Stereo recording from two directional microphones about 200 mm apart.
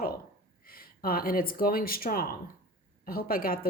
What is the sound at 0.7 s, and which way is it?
Speech, 45° left (ahead or behind).